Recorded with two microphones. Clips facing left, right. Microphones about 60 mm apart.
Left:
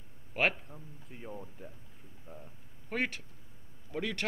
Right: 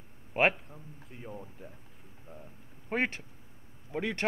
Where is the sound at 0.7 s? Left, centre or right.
Centre.